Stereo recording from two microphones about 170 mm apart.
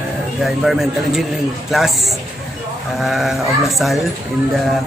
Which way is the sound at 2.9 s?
Centre (ahead or behind).